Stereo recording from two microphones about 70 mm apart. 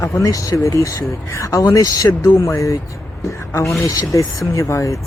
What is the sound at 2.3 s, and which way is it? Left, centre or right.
Speech, left.